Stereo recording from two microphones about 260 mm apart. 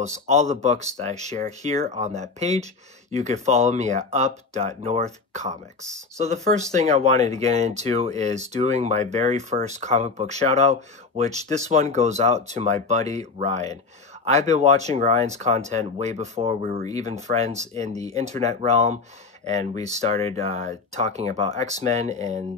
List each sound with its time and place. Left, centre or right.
0.1 s speech: right
5.8 s speech: centre
6.1 s speech: right